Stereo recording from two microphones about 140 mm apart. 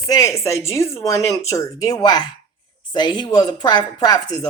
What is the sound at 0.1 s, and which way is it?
Speech, 25° left (ahead or behind).